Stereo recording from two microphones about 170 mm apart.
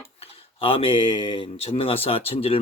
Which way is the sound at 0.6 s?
30° left (ahead or behind).